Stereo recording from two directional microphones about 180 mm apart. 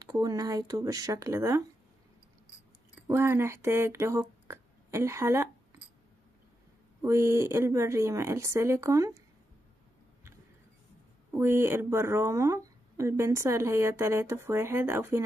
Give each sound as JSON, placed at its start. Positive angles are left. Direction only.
{"t": 0.0, "sound": "speech", "side_deg": -20}
{"t": 3.1, "sound": "speech", "side_deg": -15}
{"t": 7.0, "sound": "speech", "side_deg": -15}
{"t": 11.3, "sound": "speech", "side_deg": -15}